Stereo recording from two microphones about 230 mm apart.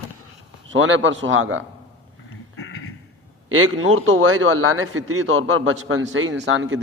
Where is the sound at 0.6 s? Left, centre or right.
Right.